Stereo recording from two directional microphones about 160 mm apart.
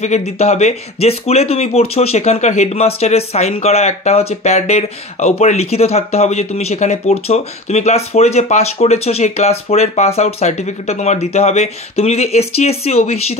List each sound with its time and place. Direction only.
0.0 s speech: 45° left (ahead or behind)